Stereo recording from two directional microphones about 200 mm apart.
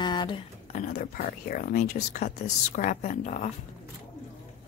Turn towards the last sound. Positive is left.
turn(degrees=35)  # may be behind; listen again after turning